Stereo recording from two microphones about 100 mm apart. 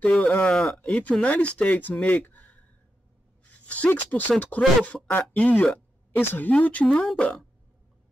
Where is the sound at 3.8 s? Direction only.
15° left (ahead or behind).